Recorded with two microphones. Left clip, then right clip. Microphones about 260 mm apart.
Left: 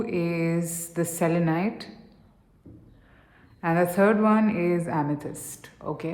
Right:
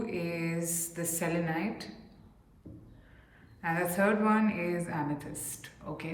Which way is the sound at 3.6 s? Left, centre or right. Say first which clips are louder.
Left 7 dB; centre.